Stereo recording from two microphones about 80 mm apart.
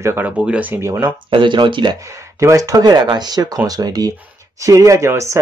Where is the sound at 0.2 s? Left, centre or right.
Centre.